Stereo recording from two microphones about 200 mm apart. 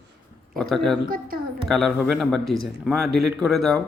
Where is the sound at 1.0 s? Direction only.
45° right (ahead or behind).